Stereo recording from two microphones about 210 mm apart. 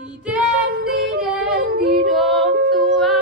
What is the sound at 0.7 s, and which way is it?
Yodeling, 55° right (ahead or behind).